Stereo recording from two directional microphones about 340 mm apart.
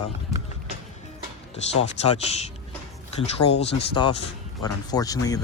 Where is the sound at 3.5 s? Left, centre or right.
Centre.